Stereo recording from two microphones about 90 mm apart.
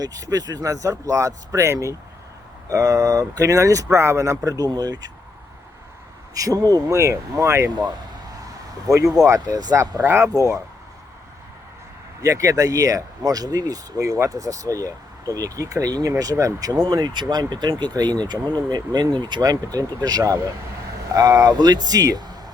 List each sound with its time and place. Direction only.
0.0 s speech: 45° right (ahead or behind)
6.3 s speech: 40° right (ahead or behind)
7.7 s speech: 50° right (ahead or behind)
8.9 s speech: 40° right (ahead or behind)
12.2 s speech: 40° right (ahead or behind)